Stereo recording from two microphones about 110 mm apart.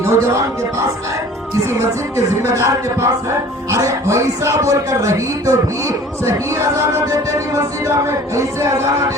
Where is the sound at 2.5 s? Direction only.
25° right (ahead or behind).